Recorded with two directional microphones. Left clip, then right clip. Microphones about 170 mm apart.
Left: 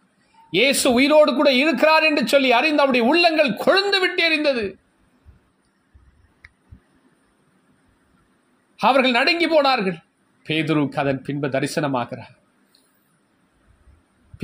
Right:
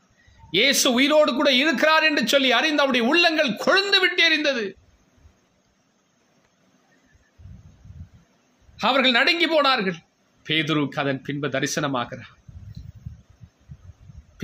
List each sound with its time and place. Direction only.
0.5 s a man's voice: 20° left (ahead or behind)
8.7 s a man's voice: 20° left (ahead or behind)